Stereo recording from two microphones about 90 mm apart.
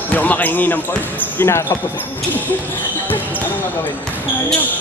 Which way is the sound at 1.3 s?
30° left (ahead or behind).